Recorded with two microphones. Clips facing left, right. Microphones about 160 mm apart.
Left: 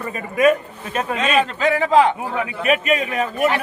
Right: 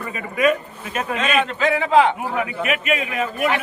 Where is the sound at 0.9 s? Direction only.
35° left (ahead or behind).